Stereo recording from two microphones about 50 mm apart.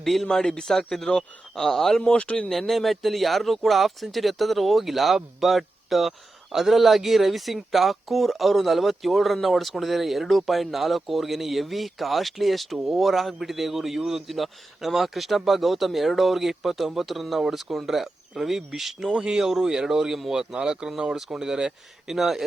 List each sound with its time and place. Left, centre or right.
0.0 s a man's voice: centre
2.1 s speech: left
2.5 s speech: centre